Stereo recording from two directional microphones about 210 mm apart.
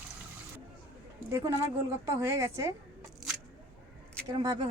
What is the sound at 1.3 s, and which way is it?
A woman's voice, 15° right (ahead or behind).